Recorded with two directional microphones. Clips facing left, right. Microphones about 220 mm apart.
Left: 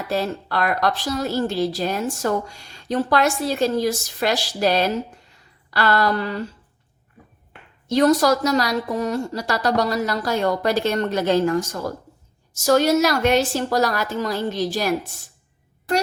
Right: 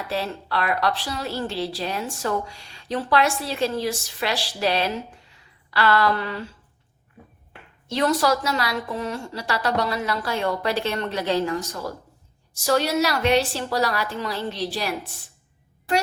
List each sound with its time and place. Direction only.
0.1 s a woman's voice: 45° left (ahead or behind)
7.9 s a woman's voice: 40° left (ahead or behind)